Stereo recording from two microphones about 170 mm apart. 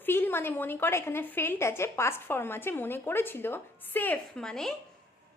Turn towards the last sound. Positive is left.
turn(degrees=5)  # may be behind; listen again after turning